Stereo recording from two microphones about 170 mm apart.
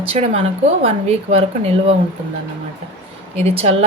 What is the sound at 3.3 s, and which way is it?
Speech, 40° right (ahead or behind).